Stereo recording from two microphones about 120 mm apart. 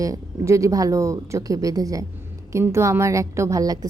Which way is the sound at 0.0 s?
25° right (ahead or behind).